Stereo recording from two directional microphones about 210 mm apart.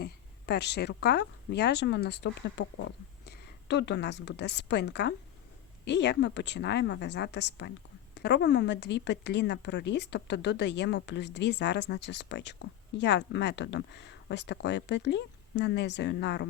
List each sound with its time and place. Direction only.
0.0 s a woman's voice: 50° left (ahead or behind)